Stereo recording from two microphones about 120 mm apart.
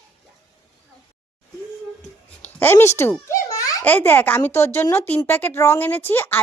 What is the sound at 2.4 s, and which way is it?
Babbling, 15° left (ahead or behind).